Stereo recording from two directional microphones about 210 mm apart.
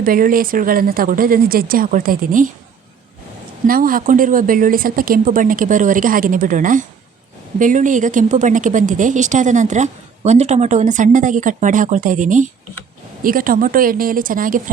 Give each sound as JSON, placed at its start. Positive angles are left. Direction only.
{"t": 0.0, "sound": "a woman's voice", "side_deg": -40}
{"t": 3.7, "sound": "a woman's voice", "side_deg": -40}